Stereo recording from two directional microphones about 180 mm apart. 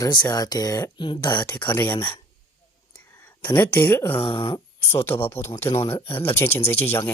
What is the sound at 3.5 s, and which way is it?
Speech, 10° left (ahead or behind).